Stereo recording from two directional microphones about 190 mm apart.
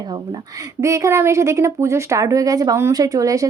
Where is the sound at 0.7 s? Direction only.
15° right (ahead or behind).